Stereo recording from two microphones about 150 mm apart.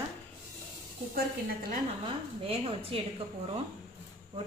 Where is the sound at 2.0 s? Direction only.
35° right (ahead or behind).